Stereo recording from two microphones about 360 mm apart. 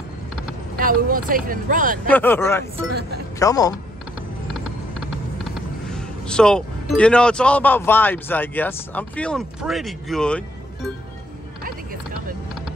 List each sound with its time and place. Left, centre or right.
0.7 s speech: right
2.0 s speech: centre
2.9 s speech: right
3.3 s speech: centre
5.4 s speech: centre